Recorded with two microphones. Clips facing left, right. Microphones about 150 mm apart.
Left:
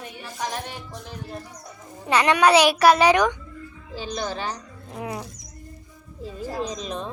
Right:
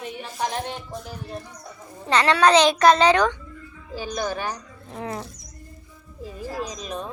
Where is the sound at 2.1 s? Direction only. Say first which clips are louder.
Even; 15° left (ahead or behind).